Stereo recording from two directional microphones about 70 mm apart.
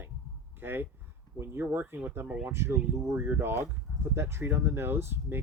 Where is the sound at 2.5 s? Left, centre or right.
Right.